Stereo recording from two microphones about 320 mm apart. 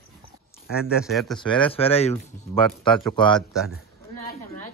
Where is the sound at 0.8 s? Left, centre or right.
Centre.